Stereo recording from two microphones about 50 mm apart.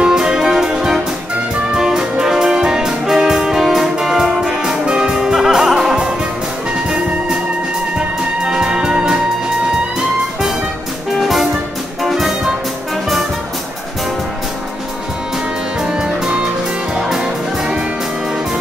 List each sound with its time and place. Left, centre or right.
0.0 s music: centre
8.5 s music: centre
11.1 s music: centre
15.8 s music: centre